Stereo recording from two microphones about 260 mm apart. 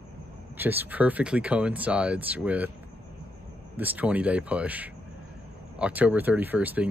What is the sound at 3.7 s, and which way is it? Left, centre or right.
Speech, centre.